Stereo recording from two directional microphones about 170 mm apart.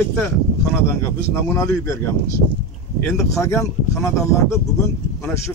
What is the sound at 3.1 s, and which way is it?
Speech, 20° left (ahead or behind).